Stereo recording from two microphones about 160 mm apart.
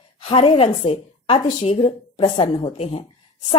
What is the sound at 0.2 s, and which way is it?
A woman's voice, 35° left (ahead or behind).